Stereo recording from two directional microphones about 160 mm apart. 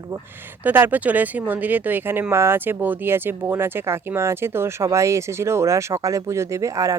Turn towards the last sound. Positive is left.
turn(degrees=-20)  # may be behind; listen again after turning